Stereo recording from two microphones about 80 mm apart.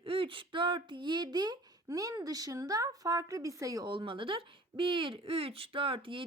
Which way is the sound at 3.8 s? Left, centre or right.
Right.